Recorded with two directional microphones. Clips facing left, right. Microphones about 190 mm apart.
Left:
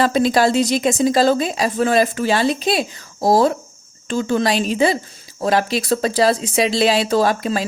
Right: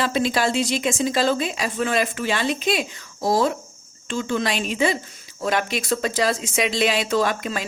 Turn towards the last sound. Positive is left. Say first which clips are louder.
# left 5 dB
turn(degrees=35)  # may be behind; listen again after turning